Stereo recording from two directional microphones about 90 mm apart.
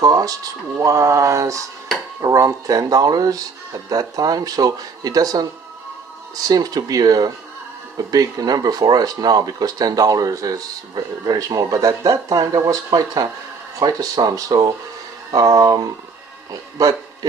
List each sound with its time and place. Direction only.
0.0 s a man's voice: 40° right (ahead or behind)